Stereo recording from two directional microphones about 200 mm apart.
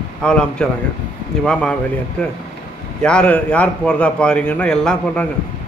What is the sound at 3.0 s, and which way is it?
A man's voice, 5° left (ahead or behind).